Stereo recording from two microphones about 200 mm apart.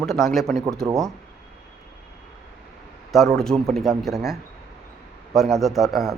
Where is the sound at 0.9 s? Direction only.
15° right (ahead or behind).